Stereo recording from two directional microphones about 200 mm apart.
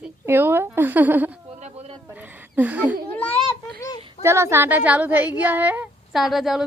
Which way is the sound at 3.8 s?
20° left (ahead or behind).